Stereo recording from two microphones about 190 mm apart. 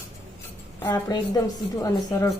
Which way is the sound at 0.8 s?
15° left (ahead or behind).